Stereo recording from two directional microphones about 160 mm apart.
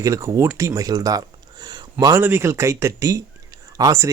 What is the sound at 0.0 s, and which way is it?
Speech, 20° right (ahead or behind).